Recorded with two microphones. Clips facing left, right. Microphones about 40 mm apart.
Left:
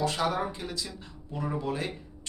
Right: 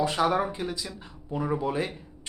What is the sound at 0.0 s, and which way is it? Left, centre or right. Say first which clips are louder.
Speech: right 4 dB; centre.